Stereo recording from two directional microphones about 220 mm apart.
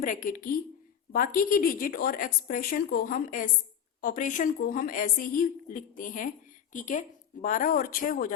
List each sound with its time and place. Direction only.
0.0 s speech: 40° left (ahead or behind)